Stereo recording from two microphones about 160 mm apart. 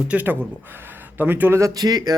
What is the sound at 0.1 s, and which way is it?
Speech, 10° right (ahead or behind).